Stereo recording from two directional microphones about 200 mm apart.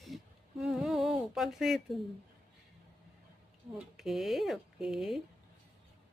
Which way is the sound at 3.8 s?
Centre (ahead or behind).